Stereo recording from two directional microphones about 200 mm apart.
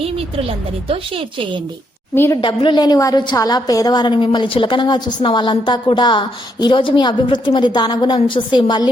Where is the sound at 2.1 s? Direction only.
15° left (ahead or behind).